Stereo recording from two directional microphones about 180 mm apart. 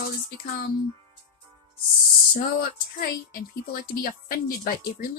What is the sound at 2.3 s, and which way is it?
A woman's voice, 55° left (ahead or behind).